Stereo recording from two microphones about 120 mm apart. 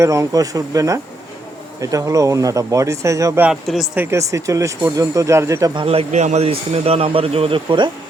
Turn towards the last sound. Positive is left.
turn(degrees=-45)  # may be behind; listen again after turning